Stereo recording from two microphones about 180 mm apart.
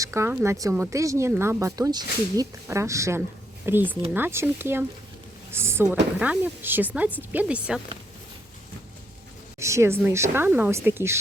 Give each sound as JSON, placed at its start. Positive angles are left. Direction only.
{"t": 0.0, "sound": "speech", "side_deg": -15}
{"t": 9.6, "sound": "speech", "side_deg": -15}